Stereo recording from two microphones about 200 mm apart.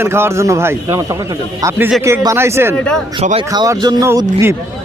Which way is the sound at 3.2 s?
30° right (ahead or behind).